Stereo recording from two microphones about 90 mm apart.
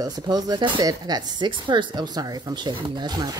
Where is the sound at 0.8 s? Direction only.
45° right (ahead or behind).